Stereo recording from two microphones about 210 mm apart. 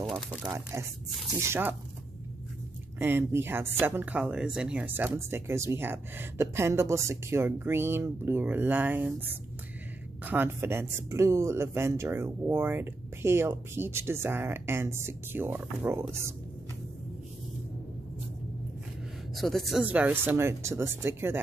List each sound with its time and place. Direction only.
0.1 s speech: 10° right (ahead or behind)
3.0 s speech: 10° right (ahead or behind)
19.3 s speech: centre (ahead or behind)